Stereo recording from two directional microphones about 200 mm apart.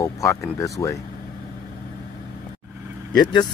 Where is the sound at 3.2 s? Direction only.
20° left (ahead or behind).